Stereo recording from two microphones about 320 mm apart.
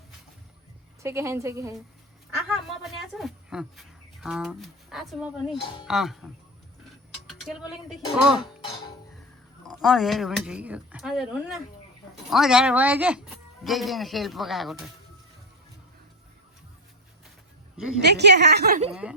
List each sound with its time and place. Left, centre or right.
1.0 s a woman's voice: centre
5.5 s speech: centre
5.8 s speech: centre
7.4 s speech: centre
9.8 s speech: centre
17.7 s a woman's voice: centre
18.0 s a woman's voice: right